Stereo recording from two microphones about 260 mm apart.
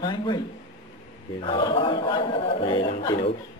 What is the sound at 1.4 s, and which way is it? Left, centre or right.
A man's voice, centre.